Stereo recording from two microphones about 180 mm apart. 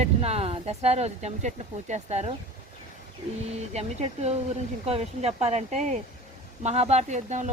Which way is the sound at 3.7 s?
35° right (ahead or behind).